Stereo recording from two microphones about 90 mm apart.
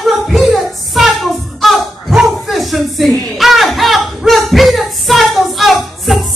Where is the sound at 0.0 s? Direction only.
Centre (ahead or behind).